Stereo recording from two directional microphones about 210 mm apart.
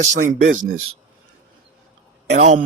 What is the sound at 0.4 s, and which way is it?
Speech, 65° right (ahead or behind).